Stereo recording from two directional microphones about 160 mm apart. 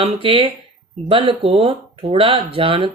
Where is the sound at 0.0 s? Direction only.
35° right (ahead or behind).